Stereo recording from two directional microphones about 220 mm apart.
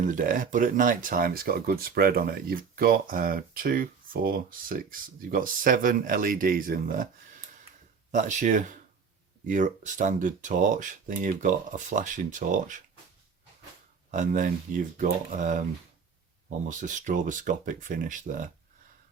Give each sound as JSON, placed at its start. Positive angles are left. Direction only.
{"t": 0.0, "sound": "speech", "side_deg": -35}
{"t": 8.1, "sound": "speech", "side_deg": -35}
{"t": 14.1, "sound": "speech", "side_deg": -35}
{"t": 16.6, "sound": "speech", "side_deg": -35}